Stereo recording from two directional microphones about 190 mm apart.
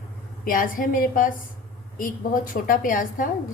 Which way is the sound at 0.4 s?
45° left (ahead or behind).